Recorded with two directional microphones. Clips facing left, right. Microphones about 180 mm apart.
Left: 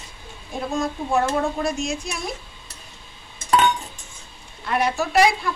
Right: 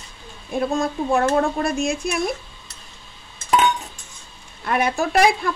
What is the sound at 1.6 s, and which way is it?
Speech, 55° right (ahead or behind).